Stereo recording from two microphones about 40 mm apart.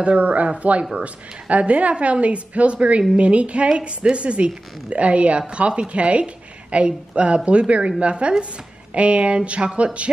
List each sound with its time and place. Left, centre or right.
0.0 s a woman's voice: right